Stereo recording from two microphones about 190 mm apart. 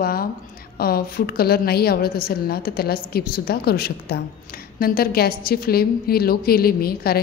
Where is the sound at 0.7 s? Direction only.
50° left (ahead or behind).